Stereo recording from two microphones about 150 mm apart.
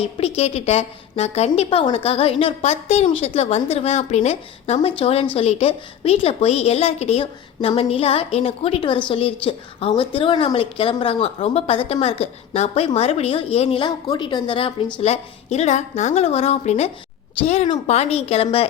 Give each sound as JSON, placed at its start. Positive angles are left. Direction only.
{"t": 0.0, "sound": "a woman's voice", "side_deg": 40}
{"t": 15.0, "sound": "a woman's voice", "side_deg": 45}